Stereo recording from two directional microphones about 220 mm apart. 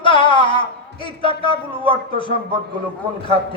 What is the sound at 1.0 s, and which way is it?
Music, 20° left (ahead or behind).